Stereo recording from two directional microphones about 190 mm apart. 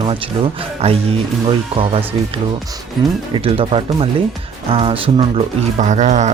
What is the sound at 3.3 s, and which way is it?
Speech, 30° right (ahead or behind).